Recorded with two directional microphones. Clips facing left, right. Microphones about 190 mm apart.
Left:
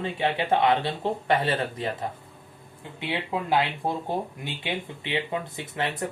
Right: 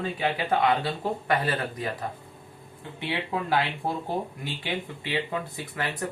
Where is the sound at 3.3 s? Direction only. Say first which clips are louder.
Left 2 dB; 20° left (ahead or behind).